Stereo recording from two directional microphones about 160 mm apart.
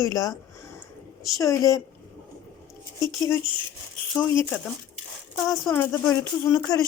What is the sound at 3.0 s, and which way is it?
Speech, 15° left (ahead or behind).